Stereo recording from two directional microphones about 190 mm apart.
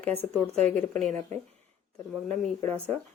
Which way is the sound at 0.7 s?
5° left (ahead or behind).